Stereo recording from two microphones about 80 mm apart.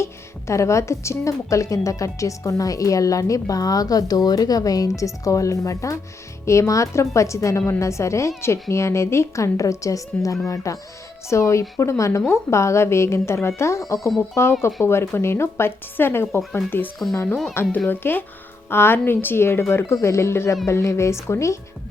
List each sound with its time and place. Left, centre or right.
0.0 s a woman's voice: left